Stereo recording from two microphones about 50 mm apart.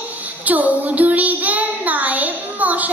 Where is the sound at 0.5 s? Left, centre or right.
Right.